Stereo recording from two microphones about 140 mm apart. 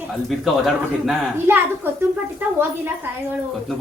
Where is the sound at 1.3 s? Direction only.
15° right (ahead or behind).